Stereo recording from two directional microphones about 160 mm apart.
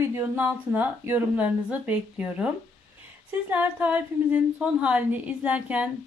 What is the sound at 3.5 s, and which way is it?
A woman's voice, 10° right (ahead or behind).